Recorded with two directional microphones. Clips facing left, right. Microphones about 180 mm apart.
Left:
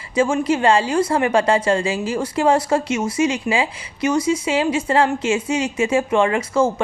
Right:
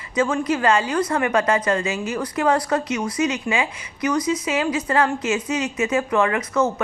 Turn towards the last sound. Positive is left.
turn(degrees=30)  # may be behind; listen again after turning